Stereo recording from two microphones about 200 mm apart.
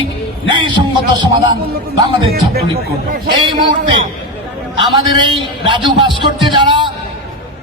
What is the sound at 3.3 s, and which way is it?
Speech, 25° right (ahead or behind).